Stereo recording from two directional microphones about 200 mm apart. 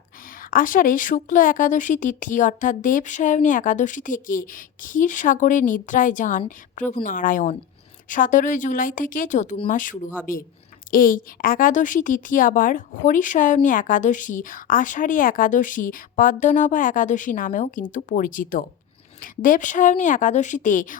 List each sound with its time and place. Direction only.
0.3 s a woman's voice: 45° left (ahead or behind)